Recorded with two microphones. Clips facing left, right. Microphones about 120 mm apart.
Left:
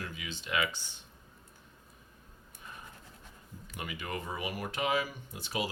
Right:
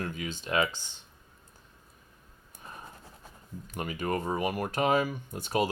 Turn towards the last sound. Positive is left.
turn(degrees=-45)  # may be behind; listen again after turning